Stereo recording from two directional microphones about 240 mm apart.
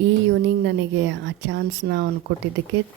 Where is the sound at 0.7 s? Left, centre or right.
Right.